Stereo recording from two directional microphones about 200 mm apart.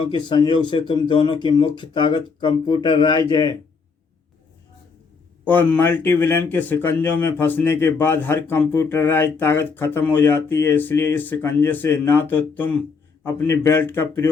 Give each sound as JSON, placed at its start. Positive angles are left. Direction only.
{"t": 0.0, "sound": "speech", "side_deg": 25}
{"t": 5.5, "sound": "speech", "side_deg": 10}